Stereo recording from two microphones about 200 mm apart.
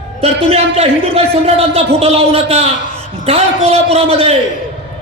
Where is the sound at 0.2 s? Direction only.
30° right (ahead or behind).